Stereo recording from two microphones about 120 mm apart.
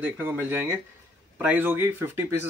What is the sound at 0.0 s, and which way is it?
Speech, 15° right (ahead or behind).